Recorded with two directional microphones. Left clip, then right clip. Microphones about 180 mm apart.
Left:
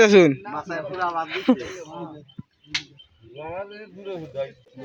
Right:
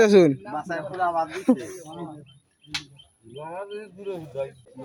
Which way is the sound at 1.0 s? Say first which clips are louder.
Right 2 dB; 25° right (ahead or behind).